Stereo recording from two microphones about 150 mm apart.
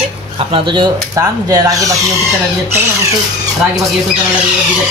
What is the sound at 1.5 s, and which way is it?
Speech, 25° right (ahead or behind).